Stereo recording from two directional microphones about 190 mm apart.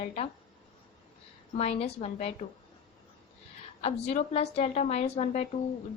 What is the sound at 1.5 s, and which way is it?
Speech, 35° left (ahead or behind).